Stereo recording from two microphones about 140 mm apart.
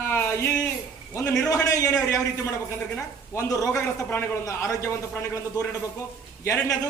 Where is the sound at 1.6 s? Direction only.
25° left (ahead or behind).